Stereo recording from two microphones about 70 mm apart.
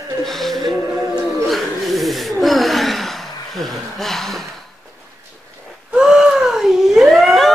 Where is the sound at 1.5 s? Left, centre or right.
Centre.